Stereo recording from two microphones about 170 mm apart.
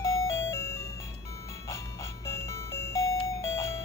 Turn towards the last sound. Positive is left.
turn(degrees=15)  # may be behind; listen again after turning